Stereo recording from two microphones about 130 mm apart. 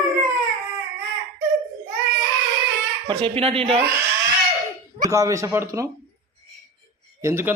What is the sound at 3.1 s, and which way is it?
Speech, 45° right (ahead or behind).